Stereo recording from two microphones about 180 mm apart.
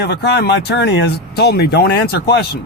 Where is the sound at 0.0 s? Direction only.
65° left (ahead or behind).